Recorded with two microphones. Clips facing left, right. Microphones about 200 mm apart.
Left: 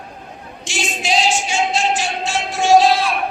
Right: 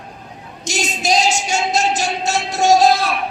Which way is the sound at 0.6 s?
40° right (ahead or behind).